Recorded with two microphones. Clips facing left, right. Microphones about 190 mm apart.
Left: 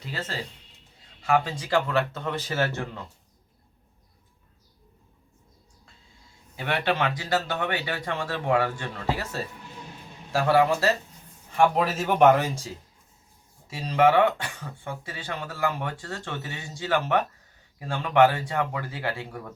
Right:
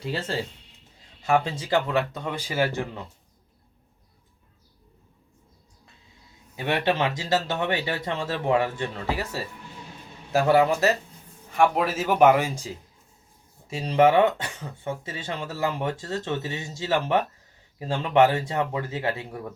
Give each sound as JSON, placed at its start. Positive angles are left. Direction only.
{"t": 1.3, "sound": "speech", "side_deg": -25}
{"t": 6.6, "sound": "speech", "side_deg": -20}
{"t": 11.5, "sound": "speech", "side_deg": 0}
{"t": 13.7, "sound": "speech", "side_deg": -25}